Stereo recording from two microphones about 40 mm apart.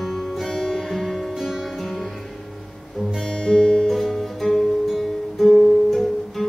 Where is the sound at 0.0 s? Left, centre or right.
Centre.